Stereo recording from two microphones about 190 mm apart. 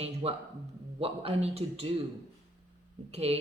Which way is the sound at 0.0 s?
30° right (ahead or behind).